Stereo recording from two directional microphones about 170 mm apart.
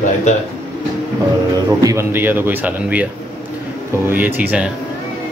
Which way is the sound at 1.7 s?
20° right (ahead or behind).